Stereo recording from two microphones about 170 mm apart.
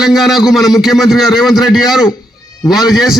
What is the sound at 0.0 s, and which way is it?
A man's voice, 5° right (ahead or behind).